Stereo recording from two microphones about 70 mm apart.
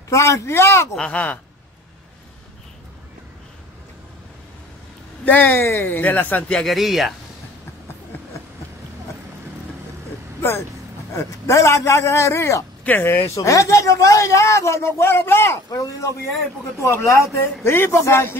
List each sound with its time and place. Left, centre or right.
0.1 s speech: left
0.9 s speech: centre
5.2 s speech: left
6.6 s speech: centre
11.2 s a man's voice: left
12.8 s speech: left
15.7 s speech: left
16.8 s speech: left